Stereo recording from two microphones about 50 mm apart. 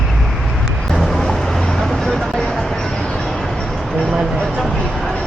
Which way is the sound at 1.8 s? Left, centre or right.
Centre.